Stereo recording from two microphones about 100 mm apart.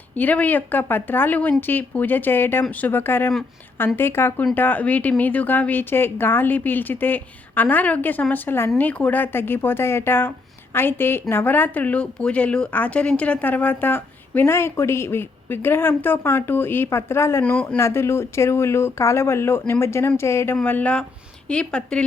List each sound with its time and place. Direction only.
0.2 s a woman's voice: 15° left (ahead or behind)
17.4 s a woman's voice: 10° left (ahead or behind)
17.7 s a woman's voice: 30° left (ahead or behind)
20.7 s a woman's voice: 15° left (ahead or behind)